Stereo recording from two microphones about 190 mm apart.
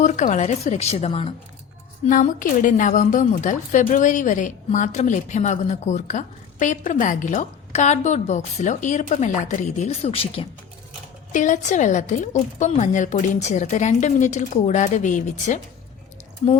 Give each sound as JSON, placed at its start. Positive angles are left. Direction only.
{"t": 0.0, "sound": "a woman's voice", "side_deg": 40}
{"t": 2.0, "sound": "a woman's voice", "side_deg": 45}
{"t": 11.3, "sound": "a woman's voice", "side_deg": 40}